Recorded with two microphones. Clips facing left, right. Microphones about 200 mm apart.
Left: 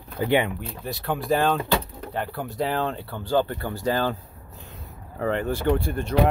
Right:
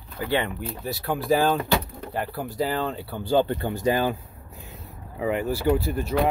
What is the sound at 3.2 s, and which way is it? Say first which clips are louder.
Speech: right 2 dB; 20° right (ahead or behind).